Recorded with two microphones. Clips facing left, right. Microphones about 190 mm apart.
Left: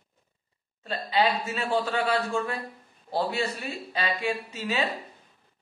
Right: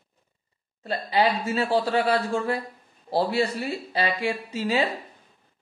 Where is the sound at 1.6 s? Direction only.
35° right (ahead or behind).